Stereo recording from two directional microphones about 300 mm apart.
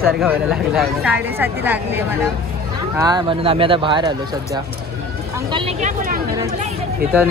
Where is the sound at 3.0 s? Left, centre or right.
Centre.